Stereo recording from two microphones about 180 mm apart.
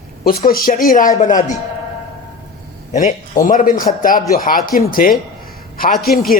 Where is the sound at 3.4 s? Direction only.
50° left (ahead or behind).